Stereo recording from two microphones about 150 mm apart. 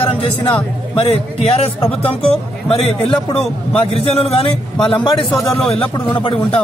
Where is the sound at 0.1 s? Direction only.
35° left (ahead or behind).